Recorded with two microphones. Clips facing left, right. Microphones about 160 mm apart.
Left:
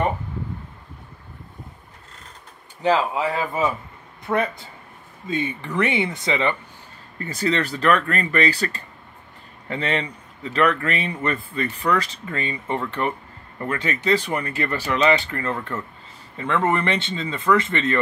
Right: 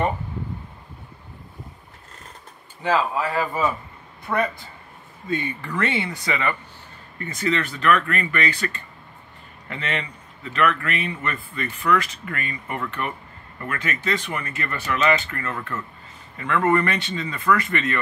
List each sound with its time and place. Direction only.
2.9 s speech: 20° left (ahead or behind)
5.3 s speech: 20° left (ahead or behind)
7.2 s speech: 35° left (ahead or behind)